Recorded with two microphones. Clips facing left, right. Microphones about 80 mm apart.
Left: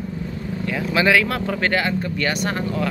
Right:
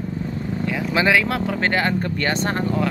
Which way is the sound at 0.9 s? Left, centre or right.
Right.